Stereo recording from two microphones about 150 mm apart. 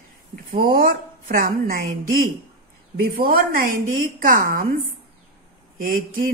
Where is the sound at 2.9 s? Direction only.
75° right (ahead or behind).